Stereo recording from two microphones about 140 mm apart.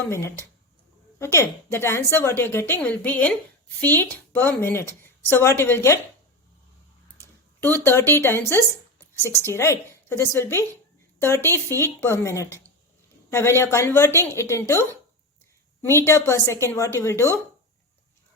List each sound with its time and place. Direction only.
0.1 s a woman's voice: 20° left (ahead or behind)
7.9 s a woman's voice: 15° left (ahead or behind)